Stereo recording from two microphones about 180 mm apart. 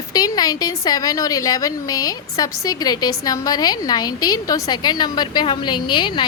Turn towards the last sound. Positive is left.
turn(degrees=25)  # may be behind; listen again after turning